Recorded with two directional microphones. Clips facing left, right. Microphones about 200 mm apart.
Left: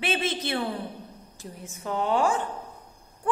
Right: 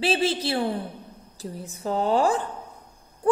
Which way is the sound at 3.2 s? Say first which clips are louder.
Right 7 dB; 35° right (ahead or behind).